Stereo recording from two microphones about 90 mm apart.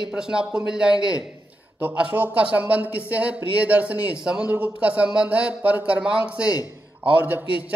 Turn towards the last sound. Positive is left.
turn(degrees=-20)  # may be behind; listen again after turning